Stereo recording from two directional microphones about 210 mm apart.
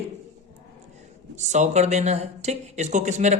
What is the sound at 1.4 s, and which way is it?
Speech, 35° right (ahead or behind).